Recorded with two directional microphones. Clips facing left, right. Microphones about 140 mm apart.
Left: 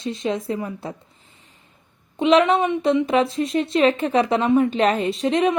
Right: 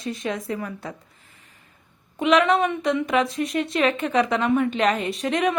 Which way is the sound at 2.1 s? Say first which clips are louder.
Left 2 dB; 30° left (ahead or behind).